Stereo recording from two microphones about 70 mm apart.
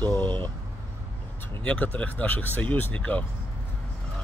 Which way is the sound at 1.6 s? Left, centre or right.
Centre.